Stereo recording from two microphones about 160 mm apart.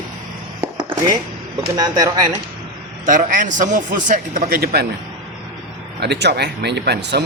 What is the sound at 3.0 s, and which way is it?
Speech, 50° right (ahead or behind).